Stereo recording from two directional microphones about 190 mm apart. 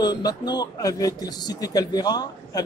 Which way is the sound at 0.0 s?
20° left (ahead or behind).